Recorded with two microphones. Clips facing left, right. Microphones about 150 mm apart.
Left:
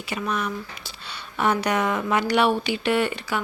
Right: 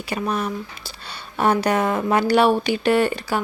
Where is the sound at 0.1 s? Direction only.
35° right (ahead or behind).